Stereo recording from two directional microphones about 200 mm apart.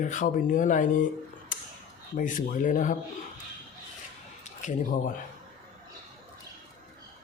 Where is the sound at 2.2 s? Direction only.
40° left (ahead or behind).